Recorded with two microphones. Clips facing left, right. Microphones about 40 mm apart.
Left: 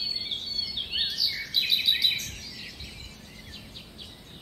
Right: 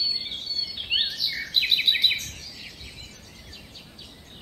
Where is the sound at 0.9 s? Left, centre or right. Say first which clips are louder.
Right 4 dB; right.